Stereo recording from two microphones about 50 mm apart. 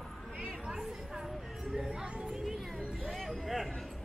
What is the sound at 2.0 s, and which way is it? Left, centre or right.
Music, centre.